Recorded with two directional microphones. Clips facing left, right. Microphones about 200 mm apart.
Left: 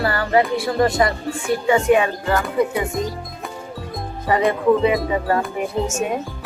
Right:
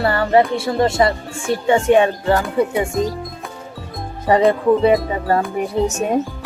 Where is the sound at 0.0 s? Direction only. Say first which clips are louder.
Right 3 dB; 25° right (ahead or behind).